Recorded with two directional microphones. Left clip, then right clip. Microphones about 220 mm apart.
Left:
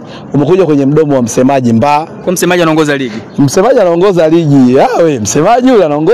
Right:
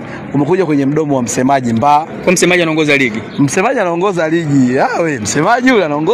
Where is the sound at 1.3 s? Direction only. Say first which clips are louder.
Left 4 dB; 45° left (ahead or behind).